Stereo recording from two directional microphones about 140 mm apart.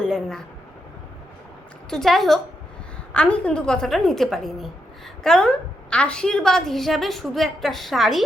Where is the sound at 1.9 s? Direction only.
5° left (ahead or behind).